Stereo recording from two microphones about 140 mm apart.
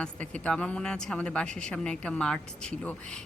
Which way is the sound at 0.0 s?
10° left (ahead or behind).